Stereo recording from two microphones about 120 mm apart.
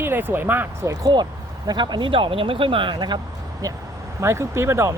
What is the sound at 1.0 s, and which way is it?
Speech, 35° right (ahead or behind).